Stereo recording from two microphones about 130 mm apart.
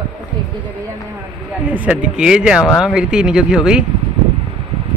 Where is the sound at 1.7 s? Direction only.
10° right (ahead or behind).